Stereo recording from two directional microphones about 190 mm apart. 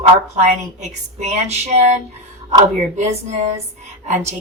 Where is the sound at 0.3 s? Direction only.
40° right (ahead or behind).